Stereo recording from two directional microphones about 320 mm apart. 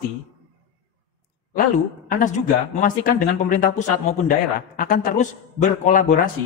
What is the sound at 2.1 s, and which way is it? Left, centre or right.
Speech, left.